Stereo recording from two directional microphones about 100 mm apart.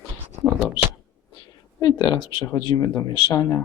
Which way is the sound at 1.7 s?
45° left (ahead or behind).